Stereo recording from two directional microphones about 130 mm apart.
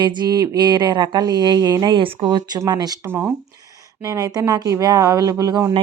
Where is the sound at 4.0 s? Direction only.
30° right (ahead or behind).